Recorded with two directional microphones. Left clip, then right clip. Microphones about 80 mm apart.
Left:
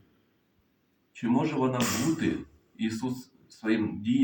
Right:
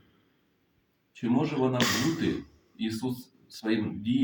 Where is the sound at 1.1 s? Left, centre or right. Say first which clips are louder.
Left 1 dB; centre.